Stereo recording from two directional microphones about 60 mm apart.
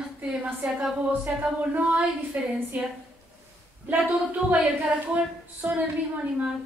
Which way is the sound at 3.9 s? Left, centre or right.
Right.